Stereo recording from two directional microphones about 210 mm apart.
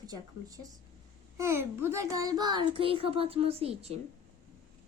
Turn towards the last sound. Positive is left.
turn(degrees=-30)  # may be behind; listen again after turning